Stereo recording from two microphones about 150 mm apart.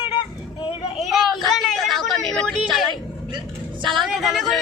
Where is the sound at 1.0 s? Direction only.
Centre (ahead or behind).